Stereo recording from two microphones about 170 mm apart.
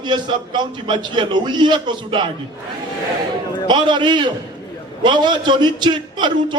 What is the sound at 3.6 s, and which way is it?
A man's voice, 25° right (ahead or behind).